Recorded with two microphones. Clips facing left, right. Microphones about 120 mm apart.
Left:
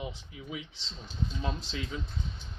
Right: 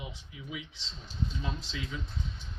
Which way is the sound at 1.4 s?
35° left (ahead or behind).